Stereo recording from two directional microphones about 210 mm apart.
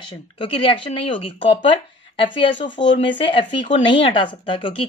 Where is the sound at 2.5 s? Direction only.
60° left (ahead or behind).